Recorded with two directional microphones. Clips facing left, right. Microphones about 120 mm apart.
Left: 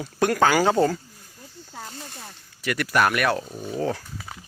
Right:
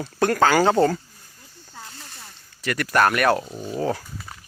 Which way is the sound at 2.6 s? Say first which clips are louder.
Right 2 dB; 10° left (ahead or behind).